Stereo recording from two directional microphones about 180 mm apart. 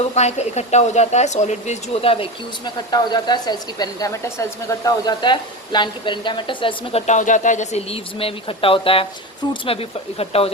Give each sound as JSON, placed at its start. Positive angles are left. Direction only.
{"t": 0.1, "sound": "a woman's voice", "side_deg": 40}
{"t": 7.1, "sound": "speech", "side_deg": 45}